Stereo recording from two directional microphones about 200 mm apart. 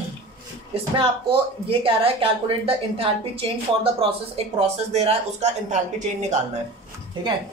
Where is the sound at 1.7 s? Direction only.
25° right (ahead or behind).